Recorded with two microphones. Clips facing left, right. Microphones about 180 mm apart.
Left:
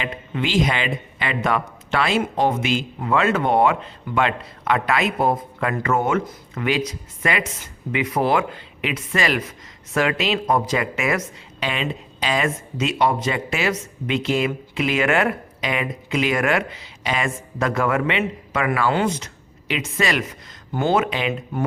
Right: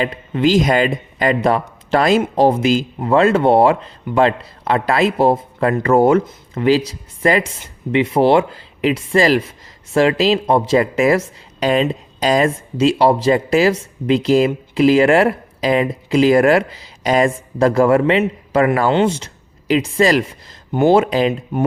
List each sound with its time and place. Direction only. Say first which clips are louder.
0.0 s speech: right 9 dB; 40° right (ahead or behind)
18.9 s speech: right 6 dB; 25° right (ahead or behind)